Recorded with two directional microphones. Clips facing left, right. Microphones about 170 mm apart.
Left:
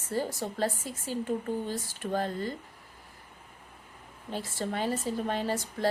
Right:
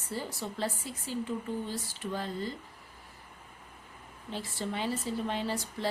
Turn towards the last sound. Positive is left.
turn(degrees=45)  # may be behind; listen again after turning